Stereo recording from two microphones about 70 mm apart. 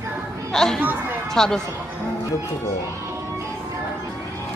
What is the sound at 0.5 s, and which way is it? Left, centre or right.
Speech, centre.